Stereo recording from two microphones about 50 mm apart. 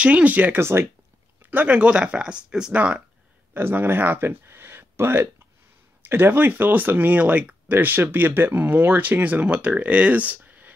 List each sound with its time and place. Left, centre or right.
0.0 s speech: right
0.6 s speech: right
1.4 s speech: right
1.8 s speech: right
2.7 s speech: right
3.5 s speech: right
4.3 s a sound: right
6.0 s speech: right